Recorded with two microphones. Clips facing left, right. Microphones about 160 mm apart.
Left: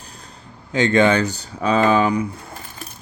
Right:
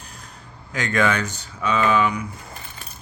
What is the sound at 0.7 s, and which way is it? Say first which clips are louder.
Speech: left 6 dB; 30° left (ahead or behind).